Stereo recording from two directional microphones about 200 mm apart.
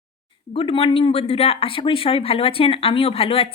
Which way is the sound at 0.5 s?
25° left (ahead or behind).